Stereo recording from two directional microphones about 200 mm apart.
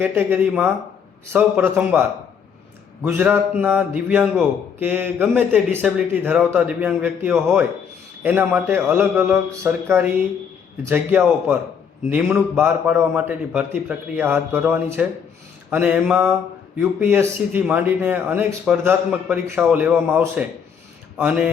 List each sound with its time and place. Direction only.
0.0 s speech: 10° right (ahead or behind)